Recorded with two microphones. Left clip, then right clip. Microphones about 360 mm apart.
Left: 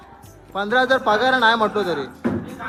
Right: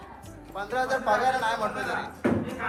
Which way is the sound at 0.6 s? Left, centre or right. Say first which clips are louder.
Left 10 dB; left.